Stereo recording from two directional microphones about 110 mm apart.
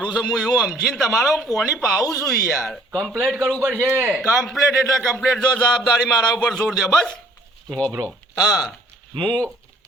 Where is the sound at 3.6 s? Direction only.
20° right (ahead or behind).